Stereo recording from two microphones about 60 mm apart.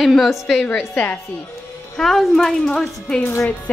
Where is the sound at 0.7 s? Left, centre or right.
Left.